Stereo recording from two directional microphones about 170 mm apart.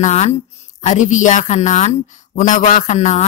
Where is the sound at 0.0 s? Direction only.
40° left (ahead or behind).